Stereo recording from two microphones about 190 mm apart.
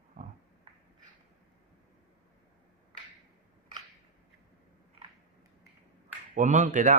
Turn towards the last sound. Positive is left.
turn(degrees=-40)  # may be behind; listen again after turning